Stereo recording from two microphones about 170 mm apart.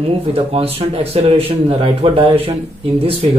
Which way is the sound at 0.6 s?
35° right (ahead or behind).